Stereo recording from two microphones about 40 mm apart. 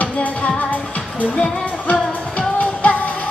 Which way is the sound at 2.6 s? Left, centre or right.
Left.